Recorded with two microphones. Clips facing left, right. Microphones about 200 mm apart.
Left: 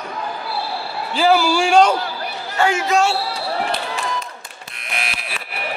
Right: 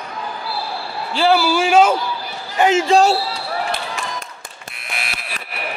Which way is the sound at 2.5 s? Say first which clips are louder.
Right 4 dB; 20° right (ahead or behind).